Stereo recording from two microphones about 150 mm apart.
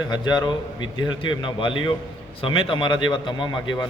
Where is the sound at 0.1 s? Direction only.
30° left (ahead or behind).